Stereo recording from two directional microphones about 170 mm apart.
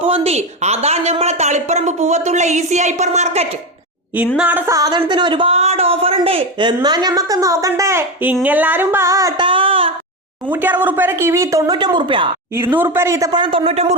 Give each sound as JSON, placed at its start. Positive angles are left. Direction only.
{"t": 0.0, "sound": "speech", "side_deg": -35}
{"t": 4.4, "sound": "a woman's voice", "side_deg": -10}
{"t": 9.5, "sound": "a sound", "side_deg": -30}
{"t": 10.5, "sound": "speech", "side_deg": -10}
{"t": 12.5, "sound": "a woman's voice", "side_deg": -10}